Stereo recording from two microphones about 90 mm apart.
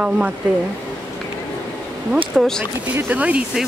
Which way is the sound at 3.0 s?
15° right (ahead or behind).